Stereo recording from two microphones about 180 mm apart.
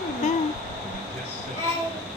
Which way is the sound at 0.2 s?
40° left (ahead or behind).